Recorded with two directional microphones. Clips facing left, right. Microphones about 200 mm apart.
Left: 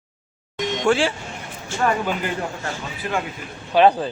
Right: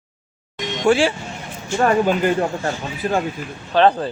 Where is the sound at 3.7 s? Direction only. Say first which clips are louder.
Even; 10° left (ahead or behind).